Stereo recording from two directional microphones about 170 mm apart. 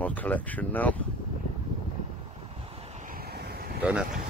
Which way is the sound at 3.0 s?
65° right (ahead or behind).